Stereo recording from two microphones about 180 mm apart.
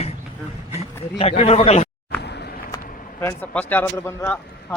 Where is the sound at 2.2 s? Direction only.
65° left (ahead or behind).